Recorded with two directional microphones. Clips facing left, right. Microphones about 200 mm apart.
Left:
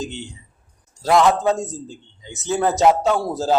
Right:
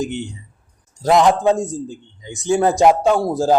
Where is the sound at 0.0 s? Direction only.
15° right (ahead or behind).